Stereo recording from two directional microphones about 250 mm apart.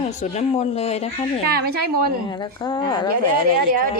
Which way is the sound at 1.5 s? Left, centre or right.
Right.